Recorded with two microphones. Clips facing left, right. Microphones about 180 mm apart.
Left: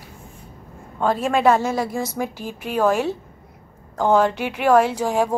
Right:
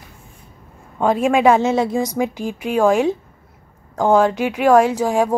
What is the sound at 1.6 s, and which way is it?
A woman's voice, 25° right (ahead or behind).